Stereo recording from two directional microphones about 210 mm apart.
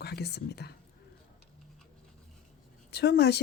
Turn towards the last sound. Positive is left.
turn(degrees=50)  # may be behind; listen again after turning